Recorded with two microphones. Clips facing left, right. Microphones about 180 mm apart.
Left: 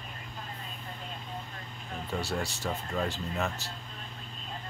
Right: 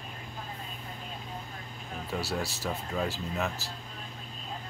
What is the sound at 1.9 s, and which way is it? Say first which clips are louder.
Speech: even; centre (ahead or behind).